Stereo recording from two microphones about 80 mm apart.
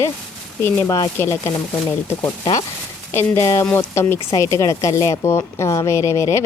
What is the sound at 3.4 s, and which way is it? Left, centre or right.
Speech, left.